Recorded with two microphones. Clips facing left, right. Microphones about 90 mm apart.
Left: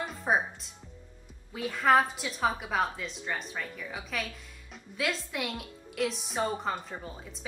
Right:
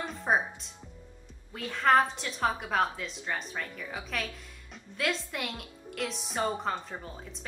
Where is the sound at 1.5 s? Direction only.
5° left (ahead or behind).